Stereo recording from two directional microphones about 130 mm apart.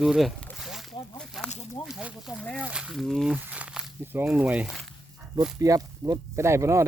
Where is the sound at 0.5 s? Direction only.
Centre (ahead or behind).